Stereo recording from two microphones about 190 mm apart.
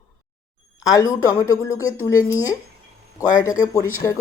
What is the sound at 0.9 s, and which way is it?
A woman's voice, 20° left (ahead or behind).